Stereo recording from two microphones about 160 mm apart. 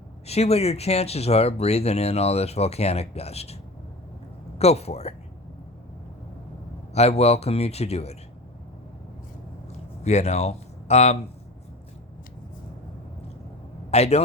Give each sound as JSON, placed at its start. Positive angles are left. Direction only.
{"t": 0.3, "sound": "speech", "side_deg": 40}
{"t": 6.9, "sound": "speech", "side_deg": 40}
{"t": 10.0, "sound": "speech", "side_deg": 45}
{"t": 13.9, "sound": "speech", "side_deg": 40}